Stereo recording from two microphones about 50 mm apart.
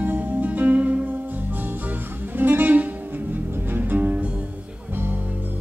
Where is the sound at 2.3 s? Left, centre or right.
Right.